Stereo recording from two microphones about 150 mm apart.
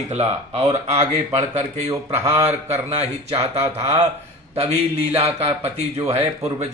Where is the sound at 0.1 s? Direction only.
40° right (ahead or behind).